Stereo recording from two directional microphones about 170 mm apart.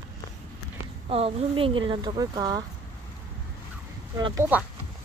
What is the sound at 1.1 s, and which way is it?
Speech, 35° right (ahead or behind).